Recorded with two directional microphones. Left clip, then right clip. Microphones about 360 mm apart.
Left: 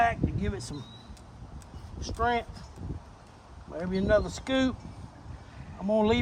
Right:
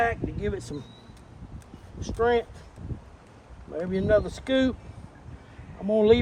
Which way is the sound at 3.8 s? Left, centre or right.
Centre.